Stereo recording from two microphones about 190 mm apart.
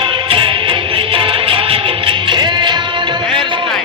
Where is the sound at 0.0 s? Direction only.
25° right (ahead or behind).